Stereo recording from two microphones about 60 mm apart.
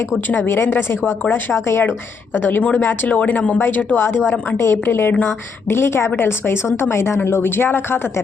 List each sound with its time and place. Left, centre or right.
0.4 s a woman's voice: left
2.3 s a woman's voice: left
4.5 s a woman's voice: left